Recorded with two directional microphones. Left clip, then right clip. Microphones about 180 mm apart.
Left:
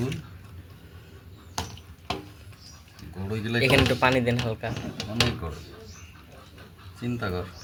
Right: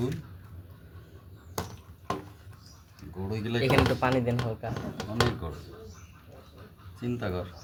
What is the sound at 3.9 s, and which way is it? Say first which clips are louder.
Speech: left 5 dB; 10° left (ahead or behind).